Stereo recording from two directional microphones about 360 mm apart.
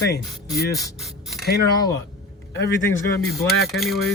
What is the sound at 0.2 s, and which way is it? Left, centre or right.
Speech, centre.